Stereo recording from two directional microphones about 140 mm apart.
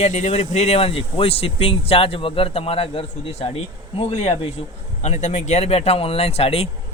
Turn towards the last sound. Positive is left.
turn(degrees=45)  # may be behind; listen again after turning